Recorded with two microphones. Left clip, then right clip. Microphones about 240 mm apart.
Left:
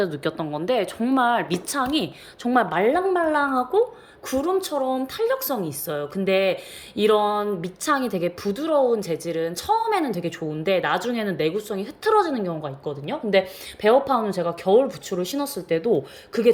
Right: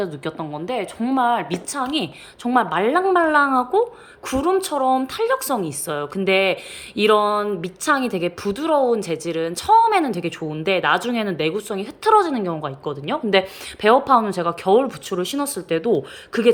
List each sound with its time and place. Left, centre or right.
0.0 s speech: centre